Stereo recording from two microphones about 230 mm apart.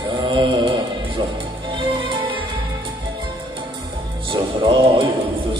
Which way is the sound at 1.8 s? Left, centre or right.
Right.